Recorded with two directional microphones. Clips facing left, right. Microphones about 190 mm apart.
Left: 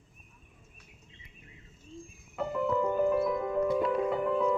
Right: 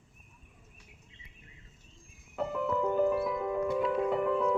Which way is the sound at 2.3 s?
Centre (ahead or behind).